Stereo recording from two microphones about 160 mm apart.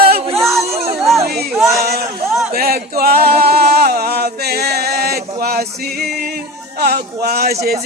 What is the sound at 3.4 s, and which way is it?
Singing, 80° right.